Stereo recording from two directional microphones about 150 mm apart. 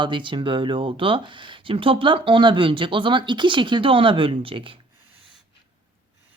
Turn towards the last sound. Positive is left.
turn(degrees=-35)  # may be behind; listen again after turning